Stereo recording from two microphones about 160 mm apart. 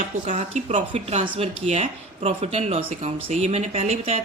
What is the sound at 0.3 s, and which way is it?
A woman's voice, 50° right (ahead or behind).